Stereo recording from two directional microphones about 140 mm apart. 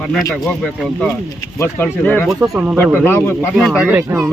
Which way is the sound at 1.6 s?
15° left (ahead or behind).